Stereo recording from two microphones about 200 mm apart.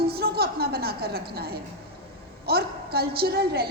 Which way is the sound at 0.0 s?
50° right (ahead or behind).